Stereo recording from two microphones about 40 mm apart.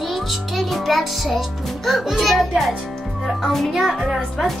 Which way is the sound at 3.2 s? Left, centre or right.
Centre.